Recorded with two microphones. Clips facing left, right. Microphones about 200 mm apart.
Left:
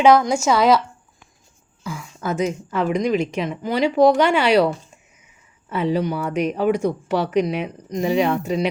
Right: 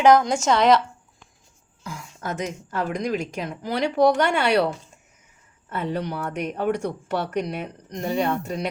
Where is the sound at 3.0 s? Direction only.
75° left (ahead or behind).